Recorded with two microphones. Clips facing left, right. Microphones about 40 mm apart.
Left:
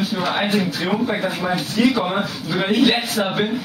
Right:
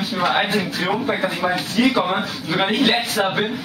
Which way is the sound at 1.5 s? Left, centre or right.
Right.